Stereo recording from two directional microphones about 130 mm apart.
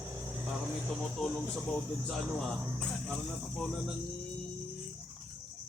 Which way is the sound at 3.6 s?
Centre (ahead or behind).